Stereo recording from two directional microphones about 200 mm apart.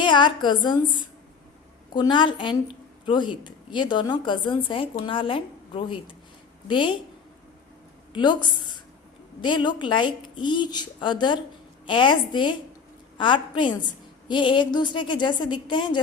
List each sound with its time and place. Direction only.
0.0 s a woman's voice: 25° left (ahead or behind)
1.9 s a woman's voice: 25° left (ahead or behind)
8.1 s a woman's voice: 20° left (ahead or behind)